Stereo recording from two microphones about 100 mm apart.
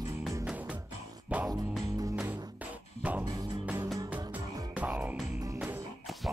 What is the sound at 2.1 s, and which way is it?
Music, 15° right (ahead or behind).